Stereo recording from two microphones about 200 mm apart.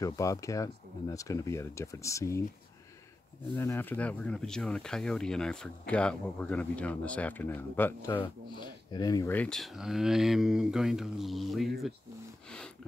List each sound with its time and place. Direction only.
0.0 s speech: 15° left (ahead or behind)
3.5 s speech: 10° left (ahead or behind)
8.1 s speech: 25° left (ahead or behind); by 11.7 s centre (ahead or behind)
12.4 s music: 5° left (ahead or behind)